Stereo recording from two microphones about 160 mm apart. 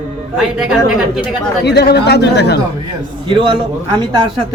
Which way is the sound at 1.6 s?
90° left.